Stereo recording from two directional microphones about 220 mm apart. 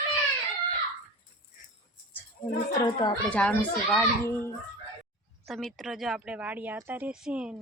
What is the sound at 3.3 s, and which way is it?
A child's voice, 5° left (ahead or behind).